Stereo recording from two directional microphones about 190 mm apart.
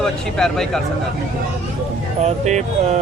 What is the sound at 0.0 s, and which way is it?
Speech, 5° left (ahead or behind).